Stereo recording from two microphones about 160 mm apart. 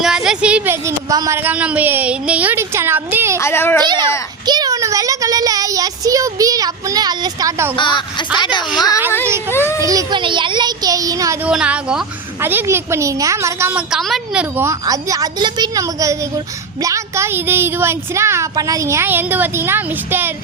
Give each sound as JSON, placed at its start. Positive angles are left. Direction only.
{"t": 0.0, "sound": "a woman's voice", "side_deg": -5}
{"t": 3.3, "sound": "speech", "side_deg": 15}
{"t": 3.8, "sound": "a child's voice", "side_deg": -25}
{"t": 7.8, "sound": "speech", "side_deg": 30}
{"t": 9.6, "sound": "a child's voice", "side_deg": -20}
{"t": 11.4, "sound": "a woman's voice", "side_deg": -5}
{"t": 14.5, "sound": "a child's voice", "side_deg": -15}